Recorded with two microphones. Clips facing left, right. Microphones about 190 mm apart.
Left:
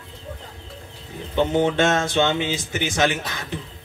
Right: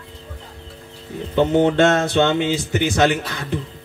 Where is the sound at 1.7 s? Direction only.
60° right (ahead or behind).